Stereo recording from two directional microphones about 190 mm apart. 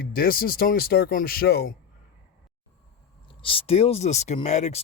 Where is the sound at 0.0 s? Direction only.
50° left (ahead or behind).